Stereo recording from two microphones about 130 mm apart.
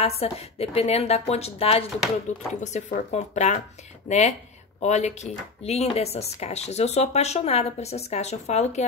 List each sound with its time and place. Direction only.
0.0 s a woman's voice: 50° left (ahead or behind)
2.3 s speech: 65° left (ahead or behind)